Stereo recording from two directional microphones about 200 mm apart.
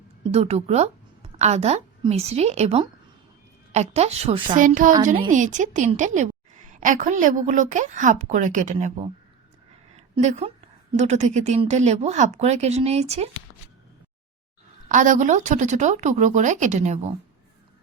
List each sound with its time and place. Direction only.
0.3 s a woman's voice: 30° right (ahead or behind)
10.2 s a woman's voice: 35° right (ahead or behind)
14.8 s a woman's voice: 40° right (ahead or behind)